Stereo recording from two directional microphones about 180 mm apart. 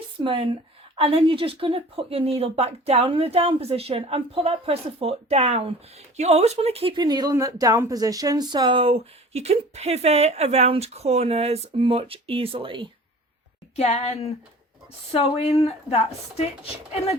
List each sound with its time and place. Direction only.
0.2 s speech: 30° right (ahead or behind)
13.7 s speech: 35° left (ahead or behind)